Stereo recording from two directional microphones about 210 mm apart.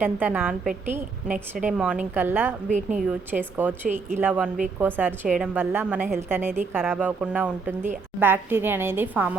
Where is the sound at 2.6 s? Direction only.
35° right (ahead or behind).